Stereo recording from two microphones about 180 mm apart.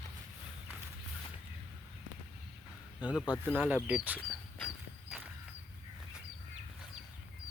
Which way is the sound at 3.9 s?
10° right (ahead or behind).